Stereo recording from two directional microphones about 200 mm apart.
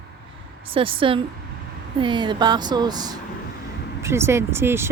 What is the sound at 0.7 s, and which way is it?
Speech, 25° right (ahead or behind).